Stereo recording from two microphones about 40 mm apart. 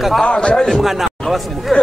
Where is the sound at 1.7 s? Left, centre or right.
Centre.